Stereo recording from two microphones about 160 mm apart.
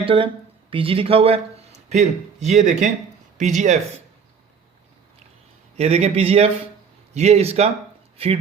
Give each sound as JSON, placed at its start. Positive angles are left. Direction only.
{"t": 0.0, "sound": "speech", "side_deg": -35}
{"t": 5.7, "sound": "speech", "side_deg": -40}